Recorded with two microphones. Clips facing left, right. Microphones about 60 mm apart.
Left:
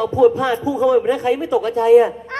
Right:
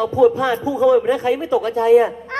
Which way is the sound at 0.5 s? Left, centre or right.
Right.